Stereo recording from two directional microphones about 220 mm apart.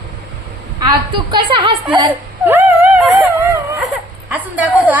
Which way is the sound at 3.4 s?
15° right (ahead or behind).